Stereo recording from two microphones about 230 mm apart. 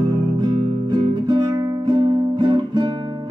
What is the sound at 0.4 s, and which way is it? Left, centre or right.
Music, centre.